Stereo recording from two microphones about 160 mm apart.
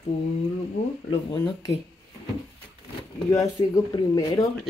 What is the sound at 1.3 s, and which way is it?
Speech, 25° left (ahead or behind).